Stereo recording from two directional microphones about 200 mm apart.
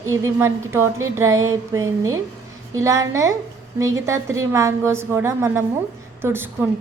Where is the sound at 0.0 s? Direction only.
10° right (ahead or behind).